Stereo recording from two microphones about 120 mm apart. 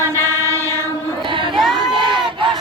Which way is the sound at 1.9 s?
40° right (ahead or behind).